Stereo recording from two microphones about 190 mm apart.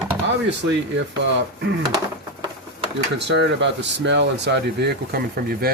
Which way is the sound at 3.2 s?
65° right (ahead or behind).